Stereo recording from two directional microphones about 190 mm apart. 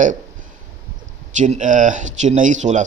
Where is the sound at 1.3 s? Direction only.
40° right (ahead or behind).